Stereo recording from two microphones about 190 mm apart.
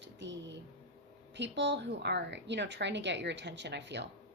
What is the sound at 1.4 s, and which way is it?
Speech, 65° right (ahead or behind).